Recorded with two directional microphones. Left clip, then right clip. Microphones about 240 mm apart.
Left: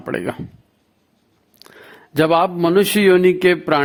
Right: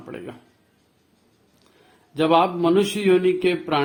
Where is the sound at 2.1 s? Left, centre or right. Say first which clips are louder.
Left 3 dB; left.